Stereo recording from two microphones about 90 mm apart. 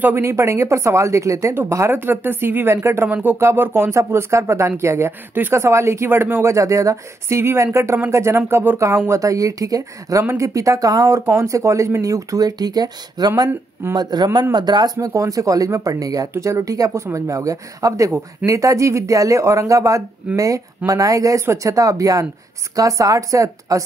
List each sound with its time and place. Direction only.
0.0 s speech: 30° right (ahead or behind)
3.1 s speech: 20° right (ahead or behind)
6.5 s a man's voice: 35° right (ahead or behind)